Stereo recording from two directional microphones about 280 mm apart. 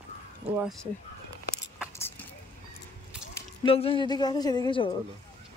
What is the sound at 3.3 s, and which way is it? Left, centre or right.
Speech, centre.